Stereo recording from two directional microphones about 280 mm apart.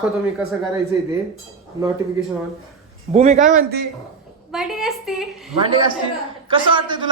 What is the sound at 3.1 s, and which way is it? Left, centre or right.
Speech, right.